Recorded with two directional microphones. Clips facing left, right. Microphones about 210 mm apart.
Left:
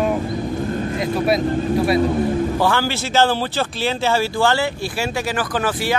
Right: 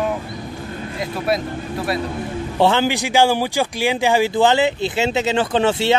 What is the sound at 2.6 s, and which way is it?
Speech, 20° right (ahead or behind).